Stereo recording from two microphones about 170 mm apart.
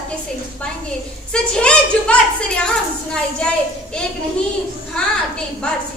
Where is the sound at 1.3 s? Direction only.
5° left (ahead or behind).